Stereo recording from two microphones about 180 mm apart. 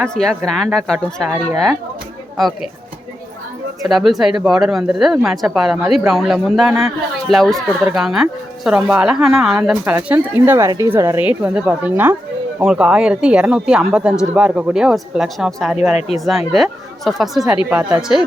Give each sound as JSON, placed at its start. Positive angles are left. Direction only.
{"t": 0.0, "sound": "speech", "side_deg": 5}
{"t": 3.8, "sound": "speech", "side_deg": 0}
{"t": 16.0, "sound": "speech", "side_deg": 40}
{"t": 16.5, "sound": "speech", "side_deg": 0}